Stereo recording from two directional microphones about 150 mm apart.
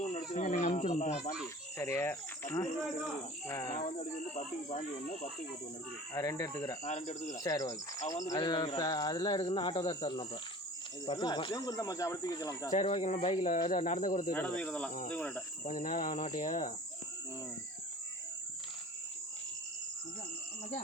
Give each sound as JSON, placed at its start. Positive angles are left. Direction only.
{"t": 0.0, "sound": "cricket", "side_deg": 55}
{"t": 1.8, "sound": "speech", "side_deg": 15}
{"t": 3.8, "sound": "speech", "side_deg": 55}
{"t": 6.1, "sound": "speech", "side_deg": 20}
{"t": 6.8, "sound": "speech", "side_deg": 50}
{"t": 7.4, "sound": "speech", "side_deg": 20}
{"t": 8.4, "sound": "speech", "side_deg": 30}
{"t": 12.8, "sound": "speech", "side_deg": 45}
{"t": 13.7, "sound": "speech", "side_deg": 60}
{"t": 14.3, "sound": "speech", "side_deg": 10}
{"t": 15.6, "sound": "speech", "side_deg": 60}